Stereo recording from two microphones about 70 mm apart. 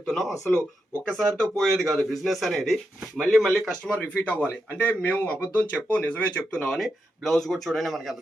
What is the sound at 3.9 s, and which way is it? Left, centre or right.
Speech, left.